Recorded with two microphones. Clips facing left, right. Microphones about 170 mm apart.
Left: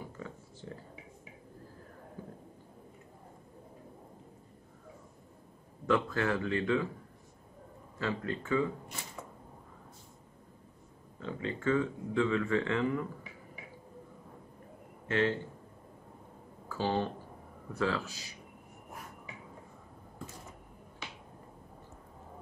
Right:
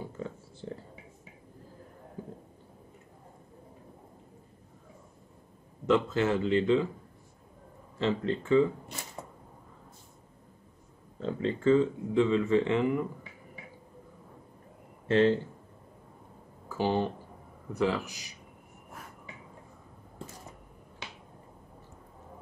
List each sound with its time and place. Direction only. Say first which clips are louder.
0.0 s a sound: right 5 dB; 30° right (ahead or behind)
5.9 s speech: right 4 dB; 20° right (ahead or behind)
8.0 s speech: right 6 dB; 25° right (ahead or behind)
11.1 s speech: right 6 dB; 30° right (ahead or behind)
15.0 s a man's voice: right 7 dB; 30° right (ahead or behind)
16.6 s speech: right 3 dB; 15° right (ahead or behind)